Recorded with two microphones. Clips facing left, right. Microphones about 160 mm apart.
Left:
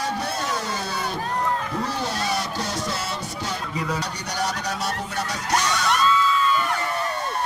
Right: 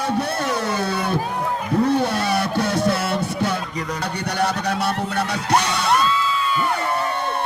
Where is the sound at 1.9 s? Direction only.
60° right (ahead or behind).